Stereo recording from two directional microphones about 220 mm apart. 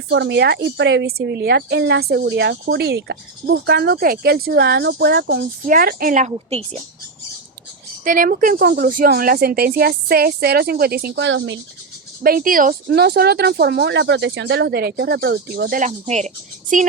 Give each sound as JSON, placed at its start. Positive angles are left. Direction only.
{"t": 0.1, "sound": "a woman's voice", "side_deg": -50}
{"t": 8.0, "sound": "a woman's voice", "side_deg": -40}
{"t": 12.2, "sound": "a woman's voice", "side_deg": -40}